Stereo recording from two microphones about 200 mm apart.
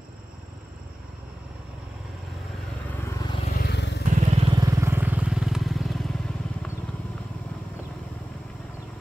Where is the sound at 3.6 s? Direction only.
60° left (ahead or behind).